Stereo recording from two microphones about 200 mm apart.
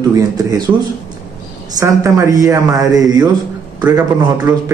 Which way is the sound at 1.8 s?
15° right (ahead or behind).